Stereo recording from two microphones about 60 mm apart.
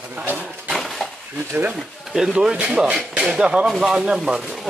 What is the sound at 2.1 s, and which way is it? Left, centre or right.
Speech, centre.